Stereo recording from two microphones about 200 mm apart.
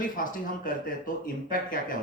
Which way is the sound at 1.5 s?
45° left (ahead or behind).